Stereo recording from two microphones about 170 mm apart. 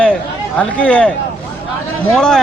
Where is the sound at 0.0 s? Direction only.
5° left (ahead or behind).